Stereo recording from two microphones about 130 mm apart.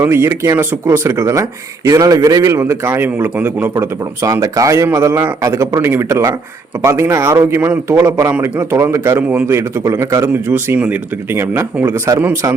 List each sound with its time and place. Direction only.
0.0 s speech: 20° right (ahead or behind)